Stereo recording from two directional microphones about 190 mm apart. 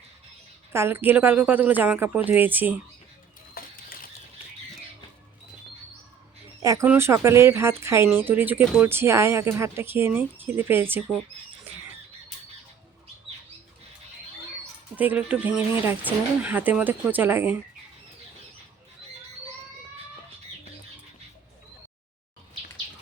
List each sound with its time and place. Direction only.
0.7 s speech: 10° right (ahead or behind)
3.6 s bird: 50° left (ahead or behind)
6.6 s speech: 15° right (ahead or behind)
11.7 s squawk: 10° right (ahead or behind)
14.9 s speech: 10° right (ahead or behind)